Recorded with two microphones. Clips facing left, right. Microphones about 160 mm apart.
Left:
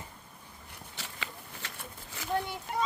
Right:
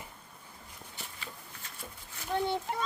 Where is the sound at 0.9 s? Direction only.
90° left.